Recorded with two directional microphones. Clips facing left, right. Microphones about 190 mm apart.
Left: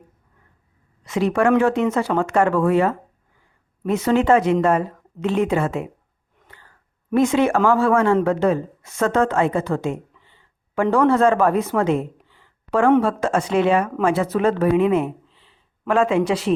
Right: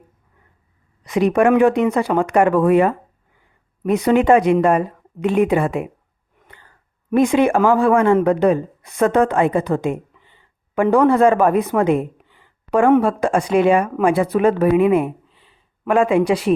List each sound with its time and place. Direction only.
1.0 s a woman's voice: 15° right (ahead or behind)
7.1 s a woman's voice: 15° right (ahead or behind)